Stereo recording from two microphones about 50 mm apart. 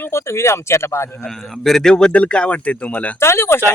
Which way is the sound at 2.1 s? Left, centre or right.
Left.